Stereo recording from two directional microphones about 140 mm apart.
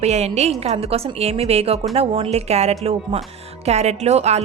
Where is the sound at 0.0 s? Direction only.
50° right (ahead or behind).